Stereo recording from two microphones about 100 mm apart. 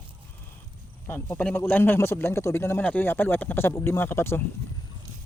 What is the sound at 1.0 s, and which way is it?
A man's voice, 20° left (ahead or behind).